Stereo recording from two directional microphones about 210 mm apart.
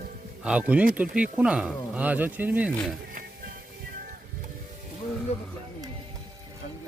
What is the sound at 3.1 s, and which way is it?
Music, 40° right (ahead or behind).